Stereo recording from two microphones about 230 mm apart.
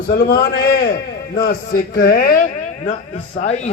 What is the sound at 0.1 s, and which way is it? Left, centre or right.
A man's voice, left.